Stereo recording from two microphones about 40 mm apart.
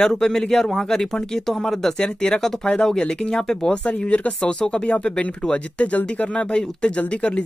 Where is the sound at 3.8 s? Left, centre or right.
Left.